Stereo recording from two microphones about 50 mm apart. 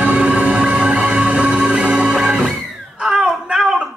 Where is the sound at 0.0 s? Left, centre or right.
Right.